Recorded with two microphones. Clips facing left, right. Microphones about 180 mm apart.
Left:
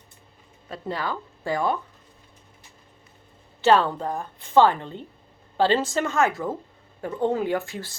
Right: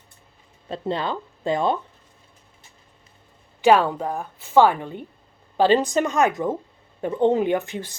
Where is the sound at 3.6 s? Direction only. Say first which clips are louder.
Right 2 dB; 10° right (ahead or behind).